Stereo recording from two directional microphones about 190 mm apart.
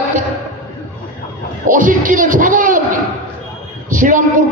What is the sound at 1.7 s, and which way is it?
Speech, 45° right (ahead or behind).